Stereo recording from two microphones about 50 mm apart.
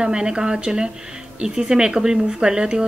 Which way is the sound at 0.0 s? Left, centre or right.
Centre.